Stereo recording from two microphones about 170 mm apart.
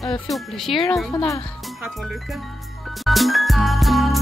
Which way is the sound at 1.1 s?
20° left (ahead or behind).